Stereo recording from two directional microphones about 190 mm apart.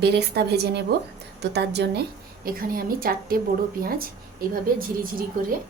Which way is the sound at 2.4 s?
50° right (ahead or behind).